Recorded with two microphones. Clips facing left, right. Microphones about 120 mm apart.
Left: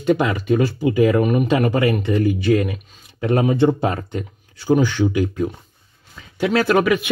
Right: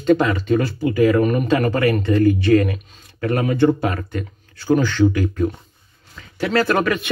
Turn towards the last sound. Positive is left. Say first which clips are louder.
# left 2 dB
turn(degrees=10)  # may be behind; listen again after turning